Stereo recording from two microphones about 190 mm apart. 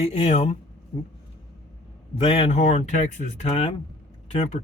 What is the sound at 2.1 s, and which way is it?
Speech, 30° left (ahead or behind).